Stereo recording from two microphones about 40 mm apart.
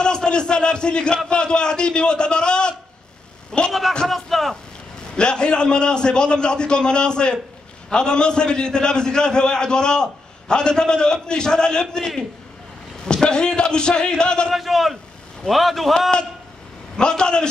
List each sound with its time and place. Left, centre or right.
0.0 s a man's voice: left
4.1 s a man's voice: centre
5.1 s a man's voice: left
14.5 s a man's voice: centre
16.9 s a man's voice: left